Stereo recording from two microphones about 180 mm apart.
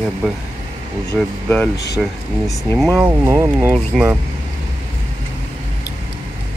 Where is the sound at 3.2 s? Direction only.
15° right (ahead or behind).